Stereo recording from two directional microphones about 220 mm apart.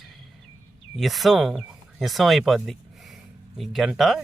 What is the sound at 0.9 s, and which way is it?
Speech, centre (ahead or behind).